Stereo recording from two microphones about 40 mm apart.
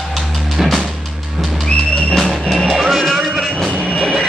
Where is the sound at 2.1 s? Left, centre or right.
Centre.